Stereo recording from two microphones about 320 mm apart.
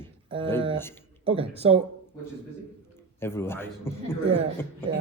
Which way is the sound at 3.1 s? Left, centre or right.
Centre.